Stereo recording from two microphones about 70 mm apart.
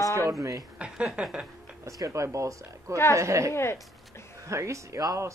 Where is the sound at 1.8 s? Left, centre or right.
Right.